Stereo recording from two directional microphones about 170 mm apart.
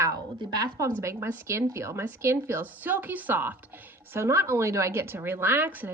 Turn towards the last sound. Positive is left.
turn(degrees=-10)  # may be behind; listen again after turning